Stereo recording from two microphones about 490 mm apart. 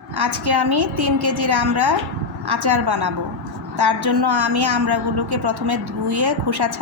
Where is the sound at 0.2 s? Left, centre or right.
Right.